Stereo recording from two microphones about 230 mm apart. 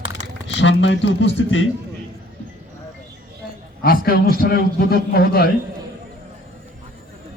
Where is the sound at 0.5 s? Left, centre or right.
Left.